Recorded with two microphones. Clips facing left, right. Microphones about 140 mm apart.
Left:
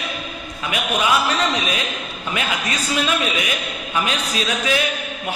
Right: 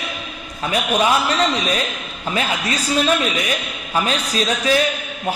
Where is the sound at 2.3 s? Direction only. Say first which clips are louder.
Right 3 dB; 35° right (ahead or behind).